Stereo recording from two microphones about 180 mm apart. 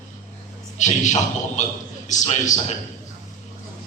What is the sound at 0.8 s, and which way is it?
A man's voice, 40° left (ahead or behind).